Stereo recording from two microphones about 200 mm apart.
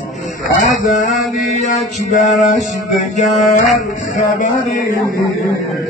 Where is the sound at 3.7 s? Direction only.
40° left (ahead or behind).